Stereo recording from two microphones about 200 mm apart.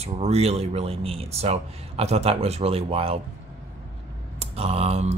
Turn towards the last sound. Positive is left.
turn(degrees=-30)  # may be behind; listen again after turning